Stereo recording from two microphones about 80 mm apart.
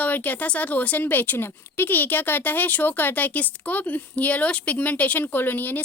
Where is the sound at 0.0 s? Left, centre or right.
Left.